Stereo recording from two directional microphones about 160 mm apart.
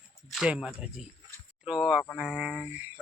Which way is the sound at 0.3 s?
Centre (ahead or behind).